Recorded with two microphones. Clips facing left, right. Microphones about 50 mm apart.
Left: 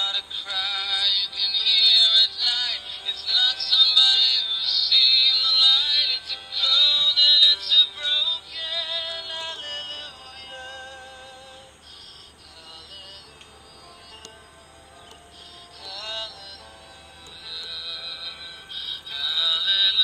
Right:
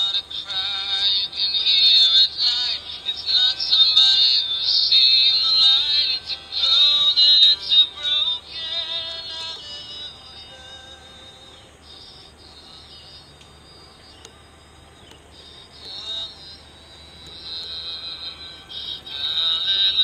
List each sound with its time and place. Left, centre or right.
0.0 s synthetic singing: left
0.4 s music: centre
9.2 s music: left
9.5 s music: left
15.8 s music: left
17.5 s music: centre